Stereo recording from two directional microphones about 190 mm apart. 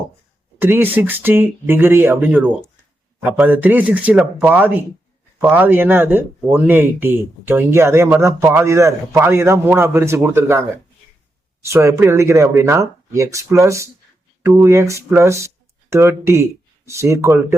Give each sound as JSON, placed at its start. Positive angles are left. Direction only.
{"t": 0.6, "sound": "speech", "side_deg": -10}